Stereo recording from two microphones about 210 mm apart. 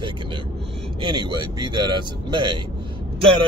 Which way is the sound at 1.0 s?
20° right (ahead or behind).